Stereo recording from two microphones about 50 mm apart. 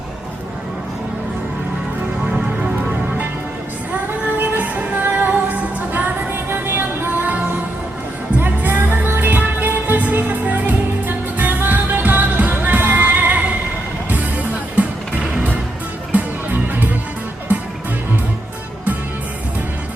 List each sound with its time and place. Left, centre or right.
2.3 s music: centre
4.4 s music: right
8.4 s music: right
16.1 s music: right